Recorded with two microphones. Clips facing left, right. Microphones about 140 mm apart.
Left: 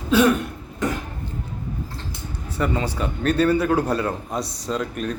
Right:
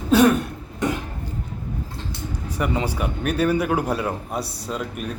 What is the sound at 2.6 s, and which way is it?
Speech, 10° right (ahead or behind).